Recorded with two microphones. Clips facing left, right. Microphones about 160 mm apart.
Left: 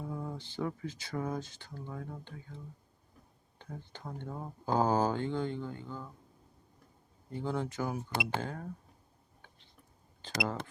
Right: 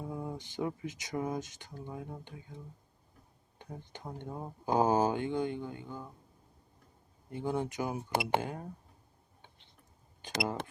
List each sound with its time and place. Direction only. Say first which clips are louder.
0.1 s speech: right 1 dB; 15° right (ahead or behind)
3.6 s speech: even; 15° right (ahead or behind)
7.3 s speech: right 1 dB; 15° right (ahead or behind)
10.2 s speech: right 1 dB; 15° right (ahead or behind)